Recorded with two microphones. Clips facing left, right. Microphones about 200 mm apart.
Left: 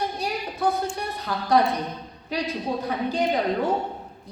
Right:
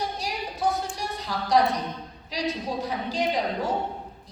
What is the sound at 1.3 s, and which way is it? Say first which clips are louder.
Speech: left 2 dB; 55° left (ahead or behind).